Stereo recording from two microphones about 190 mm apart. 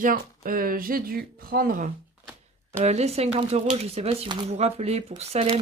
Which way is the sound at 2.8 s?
35° right (ahead or behind).